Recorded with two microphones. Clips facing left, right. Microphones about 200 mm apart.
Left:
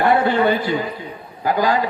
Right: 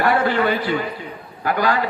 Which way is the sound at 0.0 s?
20° left (ahead or behind).